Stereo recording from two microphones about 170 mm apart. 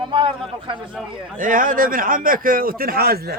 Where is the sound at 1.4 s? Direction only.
55° right (ahead or behind).